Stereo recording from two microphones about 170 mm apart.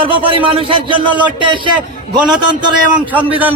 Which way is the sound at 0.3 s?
30° right (ahead or behind).